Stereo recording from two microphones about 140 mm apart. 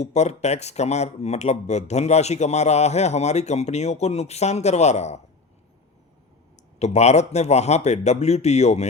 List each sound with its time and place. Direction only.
0.0 s speech: 55° left (ahead or behind)
6.7 s speech: 50° left (ahead or behind)